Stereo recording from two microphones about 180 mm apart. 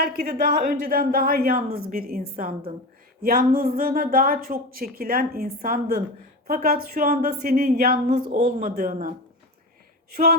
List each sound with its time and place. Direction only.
0.0 s a woman's voice: 55° right (ahead or behind)